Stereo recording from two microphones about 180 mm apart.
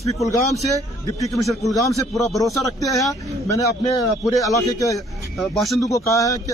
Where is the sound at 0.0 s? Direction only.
15° left (ahead or behind).